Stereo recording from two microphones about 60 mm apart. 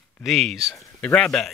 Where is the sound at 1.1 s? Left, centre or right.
Centre.